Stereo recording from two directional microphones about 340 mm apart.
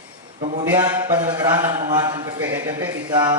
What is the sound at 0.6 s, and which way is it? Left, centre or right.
A man's voice, centre.